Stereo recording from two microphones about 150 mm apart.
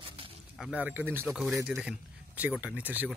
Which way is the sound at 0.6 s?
5° right (ahead or behind).